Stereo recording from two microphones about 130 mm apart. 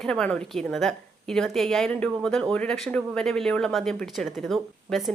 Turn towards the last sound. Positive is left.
turn(degrees=0)  # may be behind; listen again after turning